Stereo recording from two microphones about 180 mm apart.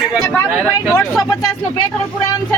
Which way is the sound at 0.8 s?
5° left (ahead or behind).